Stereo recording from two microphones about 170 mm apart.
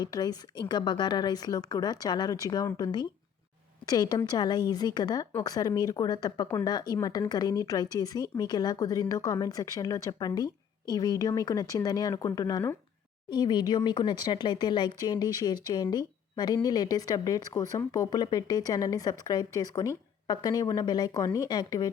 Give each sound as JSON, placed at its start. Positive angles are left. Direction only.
{"t": 0.0, "sound": "speech", "side_deg": 25}